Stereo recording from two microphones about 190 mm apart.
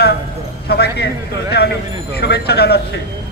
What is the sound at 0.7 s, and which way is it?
A man's voice, 60° left (ahead or behind).